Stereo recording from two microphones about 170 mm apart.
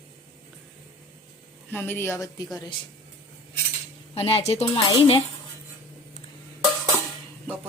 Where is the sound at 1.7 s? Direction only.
10° left (ahead or behind).